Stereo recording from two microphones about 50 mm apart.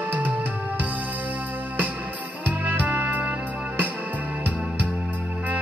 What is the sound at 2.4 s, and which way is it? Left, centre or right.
Music, right.